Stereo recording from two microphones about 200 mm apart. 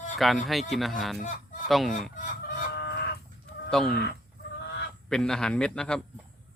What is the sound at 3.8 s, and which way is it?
Speech, 55° left (ahead or behind).